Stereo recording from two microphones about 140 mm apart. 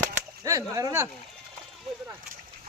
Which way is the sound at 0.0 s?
25° right (ahead or behind).